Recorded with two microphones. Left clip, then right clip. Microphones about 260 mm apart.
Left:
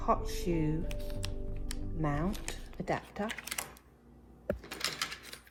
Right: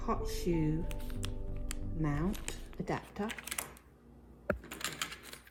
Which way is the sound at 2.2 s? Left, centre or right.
Centre.